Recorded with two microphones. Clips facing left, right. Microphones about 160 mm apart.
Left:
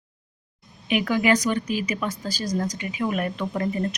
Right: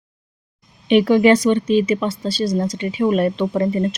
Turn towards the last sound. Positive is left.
turn(degrees=-25)  # may be behind; listen again after turning